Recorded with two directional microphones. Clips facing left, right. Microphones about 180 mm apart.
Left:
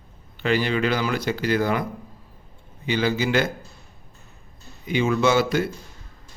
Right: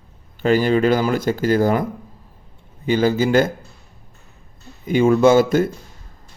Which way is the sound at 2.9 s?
45° right (ahead or behind).